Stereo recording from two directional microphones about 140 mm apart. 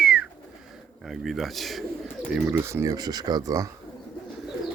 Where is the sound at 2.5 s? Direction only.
20° right (ahead or behind).